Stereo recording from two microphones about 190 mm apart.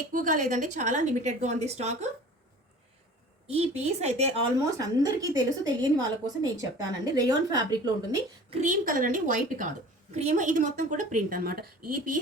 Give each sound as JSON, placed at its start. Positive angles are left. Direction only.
{"t": 0.1, "sound": "a woman's voice", "side_deg": -45}
{"t": 3.4, "sound": "a woman's voice", "side_deg": -30}
{"t": 4.8, "sound": "a woman's voice", "side_deg": -20}
{"t": 8.4, "sound": "a woman's voice", "side_deg": -40}